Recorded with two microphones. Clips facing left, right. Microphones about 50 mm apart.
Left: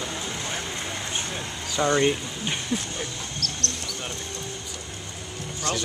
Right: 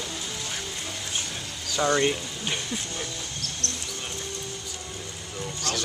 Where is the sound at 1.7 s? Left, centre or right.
Centre.